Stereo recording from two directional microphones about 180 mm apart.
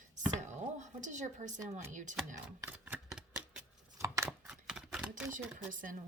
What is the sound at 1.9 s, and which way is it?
Speech, 45° right (ahead or behind).